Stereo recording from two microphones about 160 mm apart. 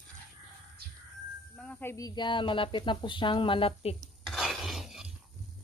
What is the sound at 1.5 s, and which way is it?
Speech, 10° left (ahead or behind).